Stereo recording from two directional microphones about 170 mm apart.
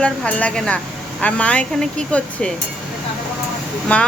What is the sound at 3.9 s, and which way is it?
Speech, 10° left (ahead or behind).